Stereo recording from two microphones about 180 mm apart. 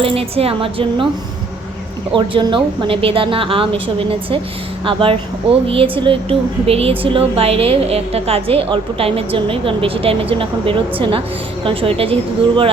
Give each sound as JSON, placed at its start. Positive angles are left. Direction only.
{"t": 0.0, "sound": "a woman's voice", "side_deg": -30}
{"t": 2.1, "sound": "a woman's voice", "side_deg": -30}
{"t": 4.9, "sound": "a woman's voice", "side_deg": -30}